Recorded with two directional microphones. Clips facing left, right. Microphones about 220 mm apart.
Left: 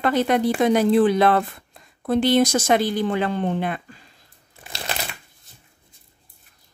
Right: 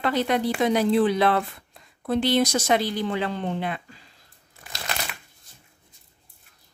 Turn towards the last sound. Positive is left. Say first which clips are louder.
# left 3 dB
turn(degrees=30)  # may be behind; listen again after turning